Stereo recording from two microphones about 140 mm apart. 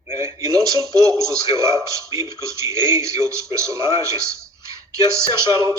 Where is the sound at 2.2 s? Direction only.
20° right (ahead or behind).